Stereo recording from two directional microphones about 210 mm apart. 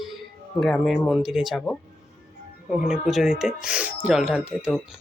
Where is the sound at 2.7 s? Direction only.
5° right (ahead or behind).